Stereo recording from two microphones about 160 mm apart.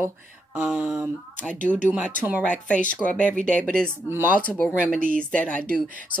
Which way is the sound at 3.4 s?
5° left (ahead or behind).